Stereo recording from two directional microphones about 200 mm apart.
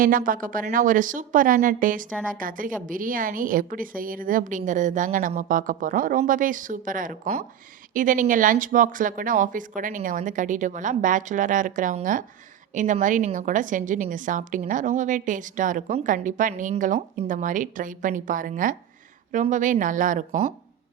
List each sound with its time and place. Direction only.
0.0 s a woman's voice: 45° right (ahead or behind)